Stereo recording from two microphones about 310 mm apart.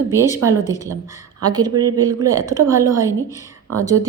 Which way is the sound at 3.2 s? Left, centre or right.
Centre.